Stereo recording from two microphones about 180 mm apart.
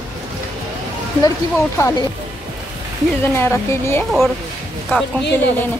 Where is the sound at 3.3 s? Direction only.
15° left (ahead or behind).